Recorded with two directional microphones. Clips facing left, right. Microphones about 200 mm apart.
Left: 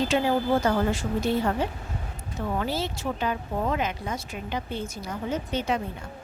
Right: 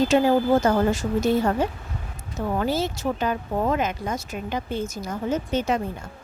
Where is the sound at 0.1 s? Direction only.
45° right (ahead or behind).